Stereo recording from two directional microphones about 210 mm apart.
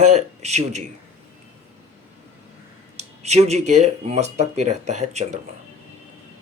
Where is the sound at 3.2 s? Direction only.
30° right (ahead or behind).